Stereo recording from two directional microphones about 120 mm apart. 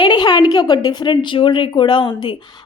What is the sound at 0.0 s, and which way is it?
A woman's voice, 35° left (ahead or behind).